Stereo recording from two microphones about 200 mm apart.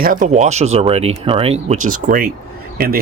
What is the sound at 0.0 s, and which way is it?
Speech, 40° right (ahead or behind).